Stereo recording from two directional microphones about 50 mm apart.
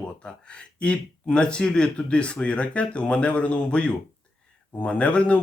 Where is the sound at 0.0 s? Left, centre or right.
Left.